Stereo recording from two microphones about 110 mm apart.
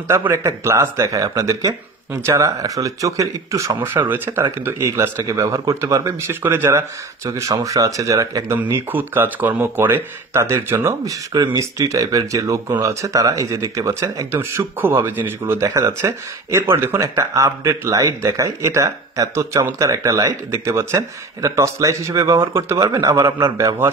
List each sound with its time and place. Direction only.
0.1 s speech: 25° right (ahead or behind)